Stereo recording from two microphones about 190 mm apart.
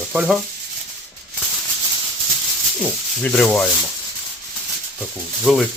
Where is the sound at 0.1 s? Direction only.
5° right (ahead or behind).